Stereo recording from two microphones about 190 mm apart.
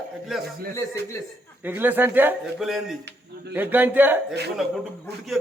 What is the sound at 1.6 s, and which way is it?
A man's voice, 10° right (ahead or behind).